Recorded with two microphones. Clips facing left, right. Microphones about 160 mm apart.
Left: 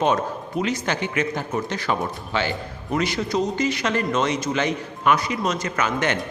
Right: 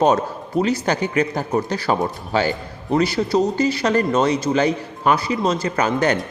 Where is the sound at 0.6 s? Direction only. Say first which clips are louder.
Right 5 dB; 35° right (ahead or behind).